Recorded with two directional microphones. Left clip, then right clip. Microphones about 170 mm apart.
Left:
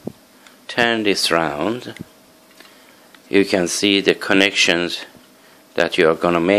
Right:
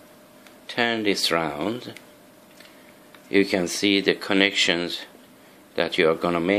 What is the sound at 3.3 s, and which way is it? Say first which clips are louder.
Speech: left 5 dB; 20° left (ahead or behind).